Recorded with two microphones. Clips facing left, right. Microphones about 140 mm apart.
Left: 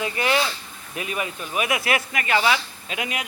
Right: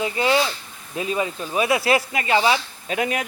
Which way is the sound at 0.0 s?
25° right (ahead or behind).